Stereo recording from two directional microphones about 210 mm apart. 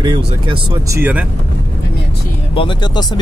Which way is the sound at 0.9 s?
10° right (ahead or behind).